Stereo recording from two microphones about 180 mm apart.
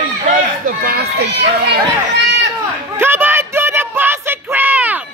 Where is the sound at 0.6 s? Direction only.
55° right (ahead or behind).